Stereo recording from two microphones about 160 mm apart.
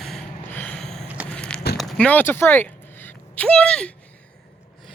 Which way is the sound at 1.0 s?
10° right (ahead or behind).